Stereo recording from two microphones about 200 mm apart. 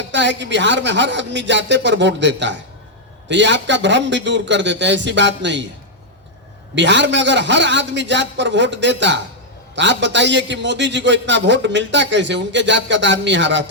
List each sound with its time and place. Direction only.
0.1 s a man's voice: 65° right (ahead or behind)
6.7 s a man's voice: 65° right (ahead or behind)